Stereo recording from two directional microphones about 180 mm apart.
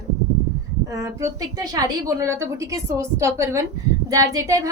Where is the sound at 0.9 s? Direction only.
15° right (ahead or behind).